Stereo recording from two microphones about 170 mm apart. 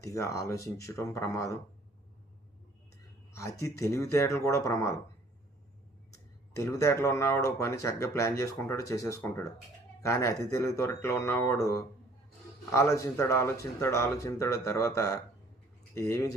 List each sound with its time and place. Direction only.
0.0 s speech: 20° left (ahead or behind)
3.3 s speech: 15° left (ahead or behind)
6.5 s speech: 20° left (ahead or behind)